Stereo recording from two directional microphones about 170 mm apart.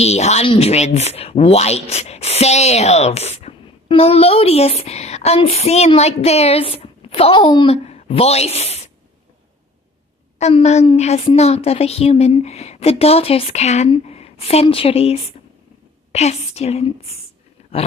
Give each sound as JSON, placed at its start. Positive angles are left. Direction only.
{"t": 0.0, "sound": "speech", "side_deg": 40}
{"t": 10.4, "sound": "speech", "side_deg": 40}
{"t": 17.6, "sound": "a sound", "side_deg": 40}